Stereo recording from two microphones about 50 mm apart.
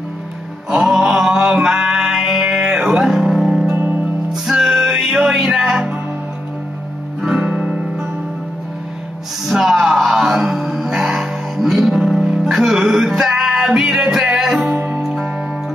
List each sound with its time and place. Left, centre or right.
0.7 s mantra: centre
3.7 s music: right
4.3 s music: centre
4.8 s music: centre
7.2 s guitar: centre
9.5 s music: centre
14.7 s music: right